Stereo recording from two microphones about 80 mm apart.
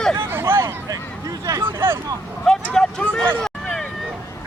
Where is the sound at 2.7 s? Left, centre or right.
Centre.